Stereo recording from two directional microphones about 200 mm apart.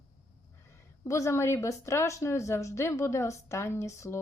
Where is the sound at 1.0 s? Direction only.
15° left (ahead or behind).